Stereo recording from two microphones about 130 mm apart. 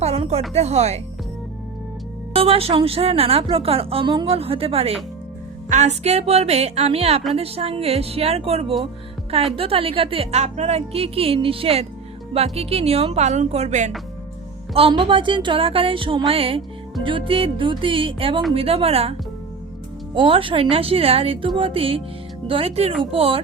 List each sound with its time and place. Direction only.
0.0 s speech: 50° right (ahead or behind)
2.3 s speech: 45° right (ahead or behind)
4.3 s speech: 50° right (ahead or behind)
5.6 s speech: 65° right (ahead or behind); by 10.4 s 45° right (ahead or behind)
10.4 s speech: 55° right (ahead or behind)
14.8 s speech: 45° right (ahead or behind)
20.1 s speech: 40° right (ahead or behind)